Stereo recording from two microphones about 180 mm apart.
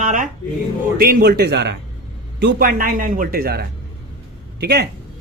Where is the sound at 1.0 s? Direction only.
55° right (ahead or behind).